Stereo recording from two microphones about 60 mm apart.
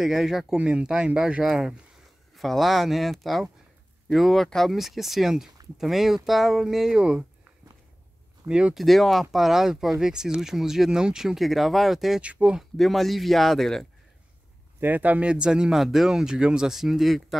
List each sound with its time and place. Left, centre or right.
0.0 s speech: centre
0.6 s speech: centre
8.5 s speech: centre
8.7 s speech: centre
12.2 s speech: centre
12.7 s speech: centre
14.8 s speech: right; by 17.4 s centre